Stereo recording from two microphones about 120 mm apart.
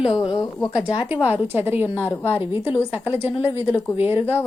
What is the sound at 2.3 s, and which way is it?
A woman's voice, 20° right (ahead or behind).